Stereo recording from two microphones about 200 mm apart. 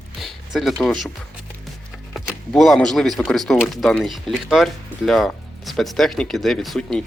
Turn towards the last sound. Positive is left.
turn(degrees=0)  # may be behind; listen again after turning